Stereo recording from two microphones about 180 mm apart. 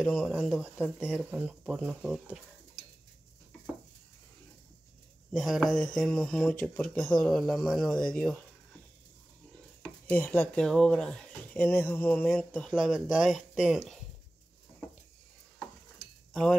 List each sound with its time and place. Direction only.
0.0 s speech: 5° left (ahead or behind)
5.3 s speech: centre (ahead or behind)
9.8 s speech: 5° left (ahead or behind)